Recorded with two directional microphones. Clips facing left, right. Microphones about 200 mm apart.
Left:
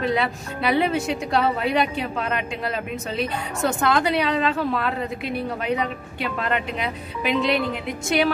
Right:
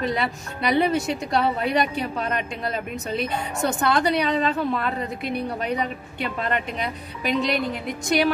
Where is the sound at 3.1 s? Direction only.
Centre (ahead or behind).